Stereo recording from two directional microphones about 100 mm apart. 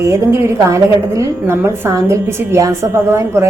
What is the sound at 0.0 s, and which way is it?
A woman's voice, 30° right (ahead or behind).